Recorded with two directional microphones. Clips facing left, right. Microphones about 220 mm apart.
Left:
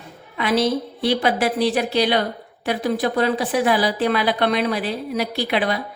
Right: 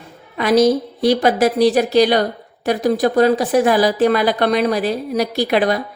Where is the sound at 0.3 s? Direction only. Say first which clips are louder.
Right 6 dB; 40° right (ahead or behind).